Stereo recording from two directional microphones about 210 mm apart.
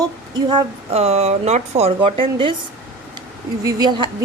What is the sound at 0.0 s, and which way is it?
Speech, 20° right (ahead or behind).